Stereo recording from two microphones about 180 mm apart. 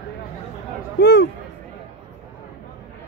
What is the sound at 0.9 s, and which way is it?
Speech, 65° left (ahead or behind).